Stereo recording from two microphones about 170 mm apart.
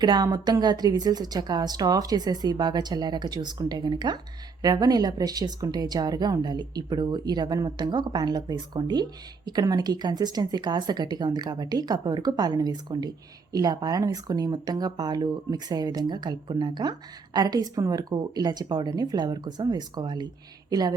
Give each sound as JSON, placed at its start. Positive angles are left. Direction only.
{"t": 0.0, "sound": "speech", "side_deg": -25}